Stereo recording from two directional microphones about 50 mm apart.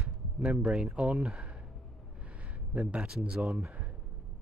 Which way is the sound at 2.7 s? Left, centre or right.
Right.